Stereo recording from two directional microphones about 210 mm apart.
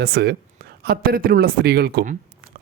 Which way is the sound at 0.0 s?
50° right (ahead or behind).